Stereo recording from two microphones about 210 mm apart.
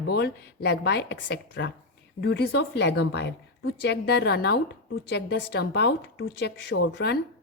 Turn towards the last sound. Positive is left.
turn(degrees=55)  # may be behind; listen again after turning